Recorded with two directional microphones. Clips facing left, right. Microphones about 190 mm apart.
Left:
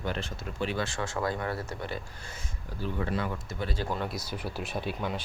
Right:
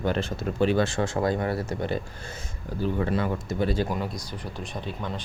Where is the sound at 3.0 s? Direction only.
40° right (ahead or behind).